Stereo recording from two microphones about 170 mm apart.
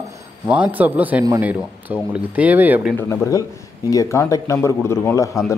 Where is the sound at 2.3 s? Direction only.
10° right (ahead or behind).